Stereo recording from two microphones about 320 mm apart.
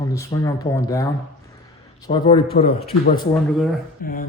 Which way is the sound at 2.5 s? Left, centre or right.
Left.